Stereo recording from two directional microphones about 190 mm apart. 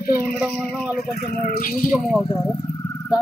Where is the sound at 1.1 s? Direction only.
50° left (ahead or behind).